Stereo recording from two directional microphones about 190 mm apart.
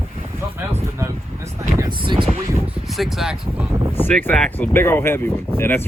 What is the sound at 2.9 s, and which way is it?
Speech, centre (ahead or behind).